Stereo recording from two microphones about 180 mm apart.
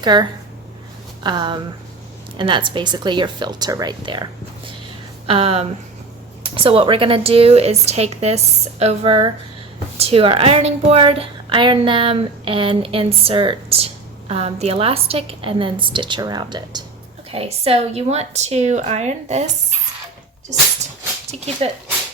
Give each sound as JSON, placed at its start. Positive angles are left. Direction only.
{"t": 0.0, "sound": "speech", "side_deg": -25}
{"t": 5.2, "sound": "a woman's voice", "side_deg": -30}